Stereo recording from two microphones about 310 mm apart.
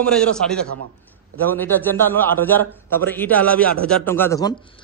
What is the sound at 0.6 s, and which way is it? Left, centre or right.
Speech, right.